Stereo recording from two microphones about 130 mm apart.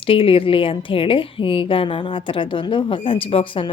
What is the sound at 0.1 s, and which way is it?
A woman's voice, 45° left (ahead or behind).